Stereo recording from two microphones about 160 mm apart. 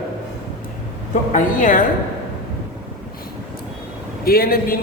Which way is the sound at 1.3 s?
55° left (ahead or behind).